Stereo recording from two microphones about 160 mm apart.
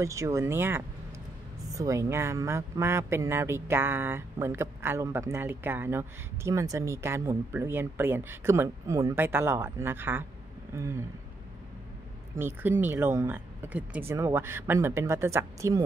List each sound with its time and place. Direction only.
0.0 s speech: 20° right (ahead or behind)
12.4 s speech: 15° right (ahead or behind)